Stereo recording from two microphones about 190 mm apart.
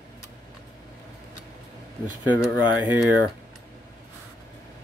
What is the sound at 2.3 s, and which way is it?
Speech, 10° right (ahead or behind).